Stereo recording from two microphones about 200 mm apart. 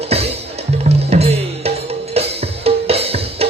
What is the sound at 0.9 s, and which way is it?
Drum, 35° right (ahead or behind).